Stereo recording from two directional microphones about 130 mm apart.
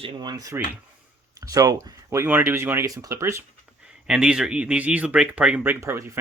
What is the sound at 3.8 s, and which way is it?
Speech, 5° right (ahead or behind).